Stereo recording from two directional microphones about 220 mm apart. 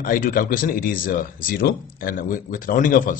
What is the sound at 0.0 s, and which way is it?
Speech, 40° left (ahead or behind).